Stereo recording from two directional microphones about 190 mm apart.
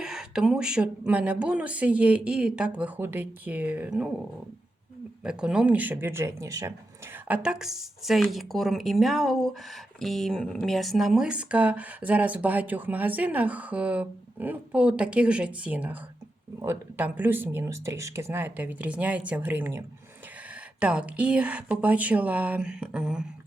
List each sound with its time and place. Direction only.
0.0 s speech: 5° right (ahead or behind)
5.2 s speech: 5° right (ahead or behind)